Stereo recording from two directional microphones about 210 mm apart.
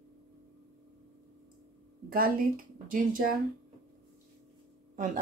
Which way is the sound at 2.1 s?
45° right (ahead or behind).